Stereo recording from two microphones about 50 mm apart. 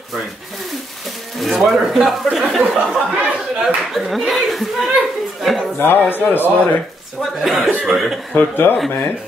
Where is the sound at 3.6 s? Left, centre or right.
Centre.